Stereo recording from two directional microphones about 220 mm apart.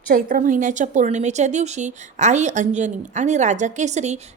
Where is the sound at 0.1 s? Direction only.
40° right (ahead or behind).